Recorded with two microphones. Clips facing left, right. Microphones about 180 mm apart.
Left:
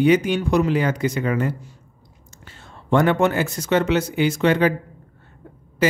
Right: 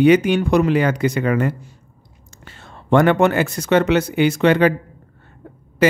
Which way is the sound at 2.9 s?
70° right (ahead or behind).